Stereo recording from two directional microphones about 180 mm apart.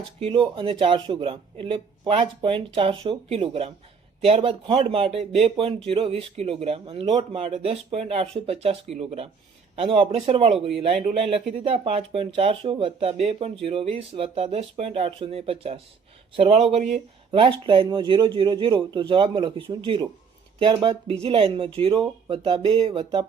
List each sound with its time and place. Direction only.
0.2 s speech: 30° right (ahead or behind)